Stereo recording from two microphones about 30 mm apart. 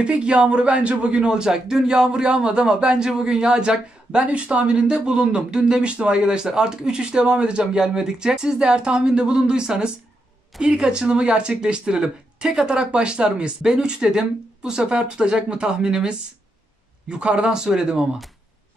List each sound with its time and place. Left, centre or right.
0.0 s a man's voice: right
1.3 s a man's voice: right
7.8 s a man's voice: right
13.6 s speech: right